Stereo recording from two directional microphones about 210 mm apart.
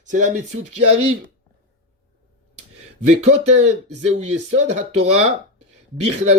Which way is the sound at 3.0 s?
30° right (ahead or behind).